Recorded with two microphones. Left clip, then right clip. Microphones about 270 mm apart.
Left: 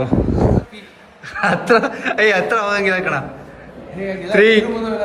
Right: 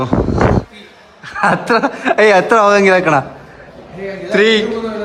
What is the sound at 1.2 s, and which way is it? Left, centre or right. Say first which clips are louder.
Speech: right 4 dB; centre.